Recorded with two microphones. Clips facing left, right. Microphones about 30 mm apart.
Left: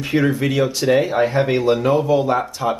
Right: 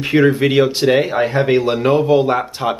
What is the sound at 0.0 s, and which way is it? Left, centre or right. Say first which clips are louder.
Speech: right 5 dB; right.